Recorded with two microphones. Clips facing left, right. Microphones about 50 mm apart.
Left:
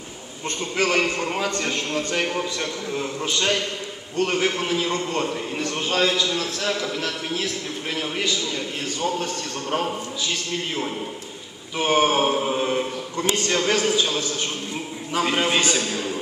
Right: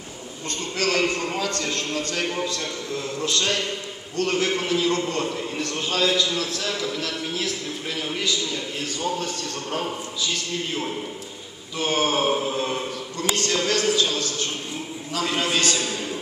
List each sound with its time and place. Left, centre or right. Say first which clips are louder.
0.7 s a man's voice: left 2 dB; left; by 8.0 s centre
11.8 s a man's voice: left 3 dB; centre